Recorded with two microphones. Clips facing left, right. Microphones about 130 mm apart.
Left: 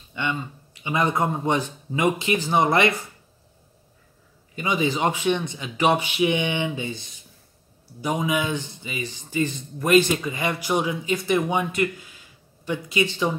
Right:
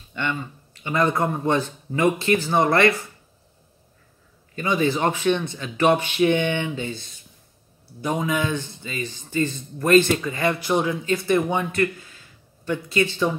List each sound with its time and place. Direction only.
0.1 s a man's voice: 15° left (ahead or behind)
4.6 s a man's voice: 15° left (ahead or behind)